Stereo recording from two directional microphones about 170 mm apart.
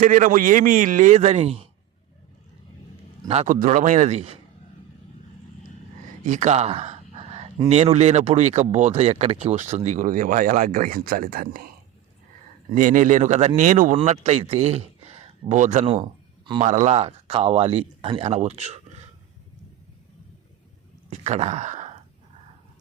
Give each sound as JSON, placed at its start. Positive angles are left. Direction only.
{"t": 0.0, "sound": "speech", "side_deg": -50}
{"t": 3.2, "sound": "speech", "side_deg": -45}
{"t": 6.2, "sound": "a sound", "side_deg": -45}
{"t": 7.7, "sound": "speech", "side_deg": -40}
{"t": 12.7, "sound": "speech", "side_deg": -50}
{"t": 13.9, "sound": "speech", "side_deg": -40}
{"t": 21.1, "sound": "speech", "side_deg": -40}